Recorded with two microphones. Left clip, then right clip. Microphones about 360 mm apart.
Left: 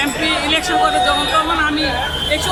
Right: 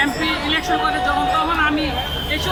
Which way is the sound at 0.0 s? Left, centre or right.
Centre.